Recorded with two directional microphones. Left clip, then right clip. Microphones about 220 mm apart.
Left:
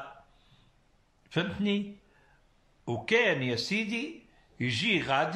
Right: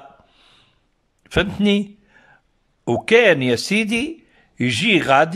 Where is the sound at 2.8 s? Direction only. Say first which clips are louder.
Right 13 dB; 50° right (ahead or behind).